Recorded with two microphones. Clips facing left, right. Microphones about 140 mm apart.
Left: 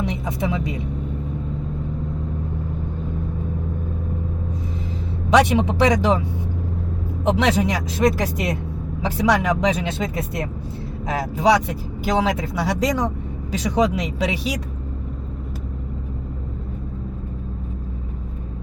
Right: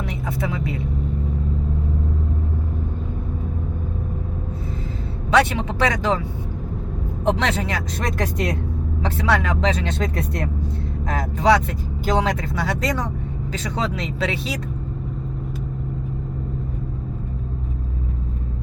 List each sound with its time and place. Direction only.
0.0 s speech: 20° left (ahead or behind)
5.3 s speech: 15° left (ahead or behind)
7.3 s speech: 10° left (ahead or behind)
7.9 s speech: centre (ahead or behind)
10.0 s speech: centre (ahead or behind)